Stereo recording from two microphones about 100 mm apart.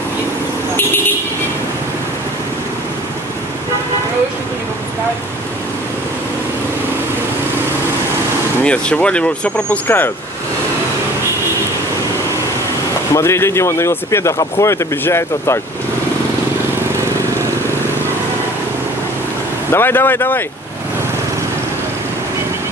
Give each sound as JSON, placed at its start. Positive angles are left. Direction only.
{"t": 8.6, "sound": "speech", "side_deg": 10}
{"t": 13.1, "sound": "speech", "side_deg": 25}
{"t": 19.7, "sound": "speech", "side_deg": 25}